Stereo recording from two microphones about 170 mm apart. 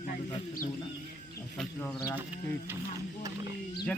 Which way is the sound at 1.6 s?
10° left (ahead or behind).